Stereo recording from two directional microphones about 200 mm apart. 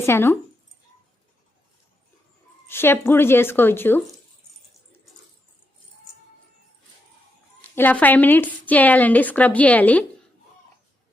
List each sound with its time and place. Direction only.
0.0 s a woman's voice: 10° left (ahead or behind)
2.6 s a woman's voice: 10° left (ahead or behind)
7.6 s a woman's voice: 10° left (ahead or behind)